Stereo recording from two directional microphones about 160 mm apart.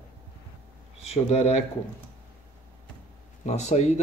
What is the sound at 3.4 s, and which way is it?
Speech, 45° left (ahead or behind).